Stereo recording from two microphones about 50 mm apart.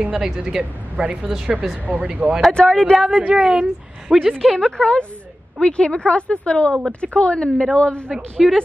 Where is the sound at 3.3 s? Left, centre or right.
Centre.